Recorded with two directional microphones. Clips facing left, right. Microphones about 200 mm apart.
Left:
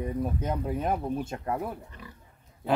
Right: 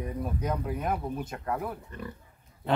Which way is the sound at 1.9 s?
55° right (ahead or behind).